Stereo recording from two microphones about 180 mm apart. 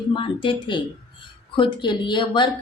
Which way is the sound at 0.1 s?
25° left (ahead or behind).